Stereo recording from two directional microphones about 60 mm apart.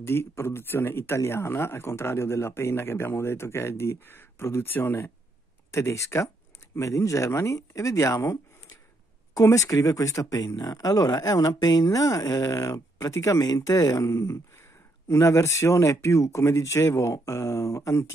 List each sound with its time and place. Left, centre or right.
0.0 s speech: left
5.7 s speech: left
9.3 s speech: left
13.1 s speech: left
13.4 s speech: left